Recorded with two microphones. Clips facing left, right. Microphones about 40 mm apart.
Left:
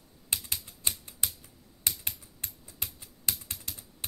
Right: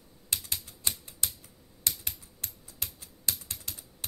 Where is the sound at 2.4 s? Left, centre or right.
Left.